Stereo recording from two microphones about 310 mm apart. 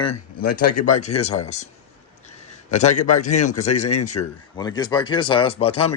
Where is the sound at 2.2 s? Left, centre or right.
Left.